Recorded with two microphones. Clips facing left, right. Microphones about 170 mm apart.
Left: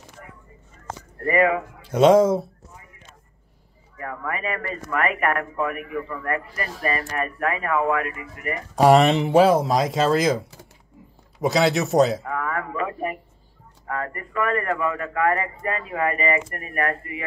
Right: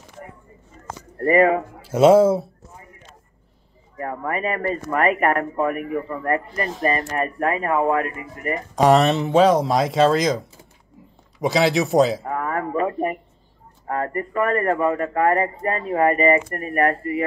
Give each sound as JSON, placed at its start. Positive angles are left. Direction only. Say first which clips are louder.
{"t": 1.1, "sound": "speech", "louder": "right 4 dB", "side_deg": -35}
{"t": 1.9, "sound": "speech", "louder": "right 2 dB", "side_deg": -5}
{"t": 3.9, "sound": "speech", "louder": "right 4 dB", "side_deg": -35}
{"t": 8.7, "sound": "speech", "louder": "left 1 dB", "side_deg": 10}
{"t": 11.4, "sound": "speech", "louder": "right 1 dB", "side_deg": 0}
{"t": 12.2, "sound": "speech", "louder": "right 3 dB", "side_deg": -35}